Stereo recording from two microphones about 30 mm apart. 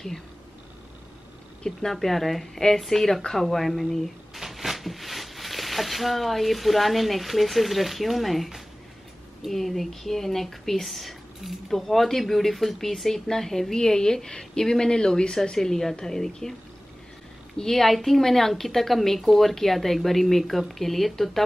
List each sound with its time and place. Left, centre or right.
1.9 s speech: centre
3.2 s speech: centre
3.4 s speech: centre
4.3 s speech: centre
9.5 s speech: centre
17.6 s a woman's voice: centre